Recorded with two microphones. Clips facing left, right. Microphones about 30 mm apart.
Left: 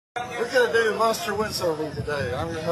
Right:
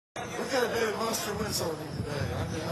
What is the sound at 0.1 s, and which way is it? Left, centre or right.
Speech, left.